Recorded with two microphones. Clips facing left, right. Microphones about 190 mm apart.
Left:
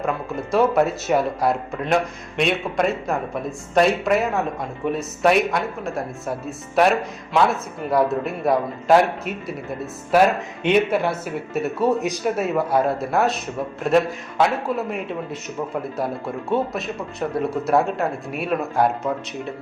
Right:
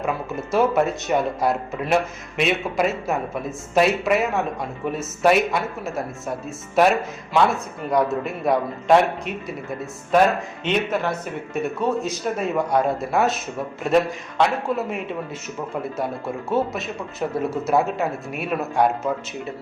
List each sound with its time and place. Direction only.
0.5 s speech: centre (ahead or behind)
10.6 s speech: 10° left (ahead or behind)
11.9 s speech: 15° left (ahead or behind)
12.2 s speech: 5° left (ahead or behind)
16.5 s speech: centre (ahead or behind)